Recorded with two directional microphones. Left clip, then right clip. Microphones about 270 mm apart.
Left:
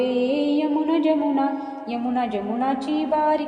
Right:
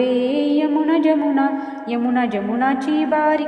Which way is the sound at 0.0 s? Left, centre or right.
Right.